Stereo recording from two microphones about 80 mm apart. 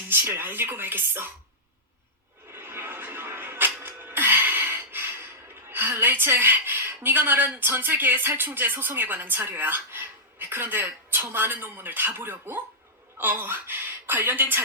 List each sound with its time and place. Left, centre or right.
0.1 s speech: right
2.5 s a sound: right
5.6 s a woman's voice: right